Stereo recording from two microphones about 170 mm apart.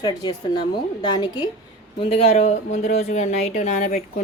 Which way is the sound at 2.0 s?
35° left (ahead or behind).